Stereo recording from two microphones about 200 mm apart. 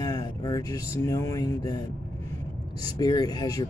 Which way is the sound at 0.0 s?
20° left (ahead or behind).